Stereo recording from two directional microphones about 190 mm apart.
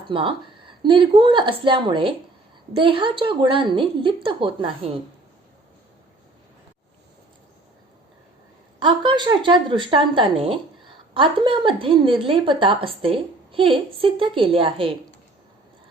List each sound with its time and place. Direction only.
0.1 s a woman's voice: 25° right (ahead or behind)
8.8 s a woman's voice: 25° right (ahead or behind)